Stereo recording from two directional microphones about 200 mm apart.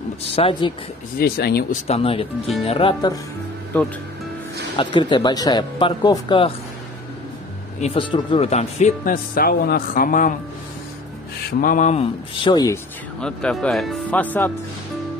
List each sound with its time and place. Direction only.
0.4 s speech: 25° left (ahead or behind)
1.2 s speech: 50° left (ahead or behind)
1.9 s speech: 30° left (ahead or behind)
3.7 s speech: 5° left (ahead or behind)
4.7 s speech: 25° left (ahead or behind)
7.8 s speech: 25° left (ahead or behind); by 10.3 s 45° left (ahead or behind)
11.6 s speech: 40° left (ahead or behind); by 12.7 s 20° left (ahead or behind)
13.2 s speech: 5° left (ahead or behind)